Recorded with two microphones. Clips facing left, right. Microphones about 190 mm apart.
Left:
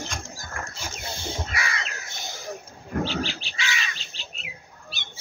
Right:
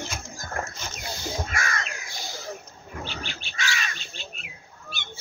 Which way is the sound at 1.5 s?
45° right (ahead or behind).